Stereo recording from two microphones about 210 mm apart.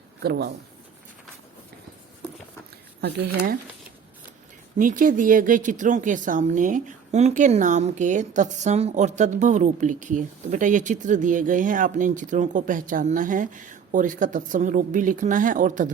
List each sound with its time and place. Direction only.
0.2 s speech: 50° right (ahead or behind)
3.0 s speech: 45° right (ahead or behind)
4.8 s speech: 40° right (ahead or behind)